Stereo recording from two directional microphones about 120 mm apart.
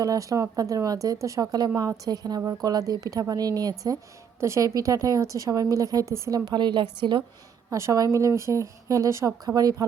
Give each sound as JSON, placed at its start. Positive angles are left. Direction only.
{"t": 0.0, "sound": "a woman's voice", "side_deg": -30}
{"t": 7.7, "sound": "a woman's voice", "side_deg": -25}